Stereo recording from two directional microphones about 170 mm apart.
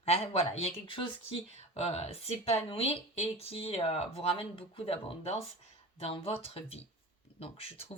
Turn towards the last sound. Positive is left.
turn(degrees=35)  # may be behind; listen again after turning